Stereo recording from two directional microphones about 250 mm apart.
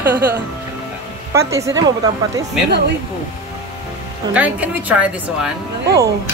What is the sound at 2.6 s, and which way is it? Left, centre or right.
Speech, right.